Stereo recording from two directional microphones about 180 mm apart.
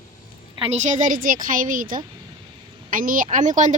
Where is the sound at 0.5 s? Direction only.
35° right (ahead or behind).